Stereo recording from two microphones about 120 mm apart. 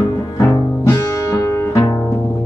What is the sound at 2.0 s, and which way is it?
Music, 10° left (ahead or behind).